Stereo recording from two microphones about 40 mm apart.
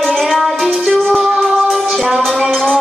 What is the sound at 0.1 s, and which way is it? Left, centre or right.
Music, centre.